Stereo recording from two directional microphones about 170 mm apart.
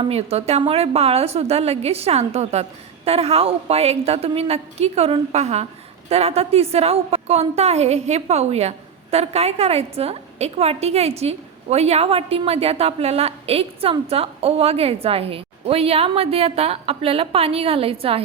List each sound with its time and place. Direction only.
0.0 s a woman's voice: 35° right (ahead or behind)